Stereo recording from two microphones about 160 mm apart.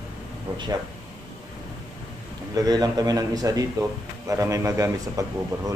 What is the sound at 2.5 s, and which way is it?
A man's voice, 25° right (ahead or behind).